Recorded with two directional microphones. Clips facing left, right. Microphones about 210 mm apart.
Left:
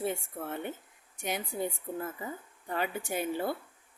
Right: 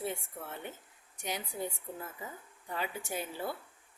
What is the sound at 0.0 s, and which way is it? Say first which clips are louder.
A woman's voice: left 5 dB; 55° left (ahead or behind).